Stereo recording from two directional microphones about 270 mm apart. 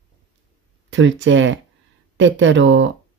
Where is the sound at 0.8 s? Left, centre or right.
Right.